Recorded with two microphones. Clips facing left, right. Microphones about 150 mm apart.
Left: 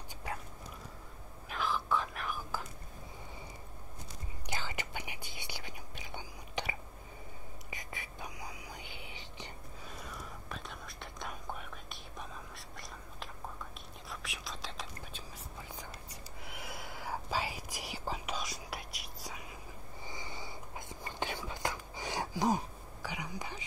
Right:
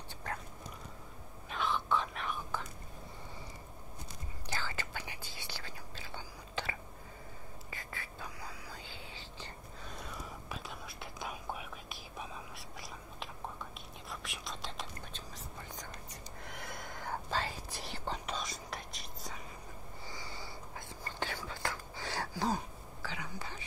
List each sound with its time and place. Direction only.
0.3 s a sound: 10° left (ahead or behind)
1.5 s whispering: centre (ahead or behind)
4.5 s whispering: 15° left (ahead or behind)
9.8 s whispering: centre (ahead or behind)
20.1 s whispering: 20° left (ahead or behind)